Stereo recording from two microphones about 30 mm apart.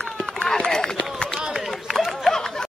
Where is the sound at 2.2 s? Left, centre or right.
Centre.